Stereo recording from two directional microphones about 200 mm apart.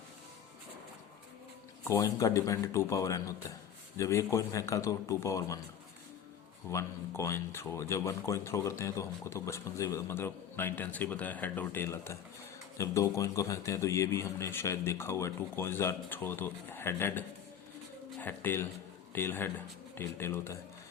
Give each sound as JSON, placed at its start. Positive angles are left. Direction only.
{"t": 1.9, "sound": "speech", "side_deg": 15}
{"t": 6.7, "sound": "speech", "side_deg": 15}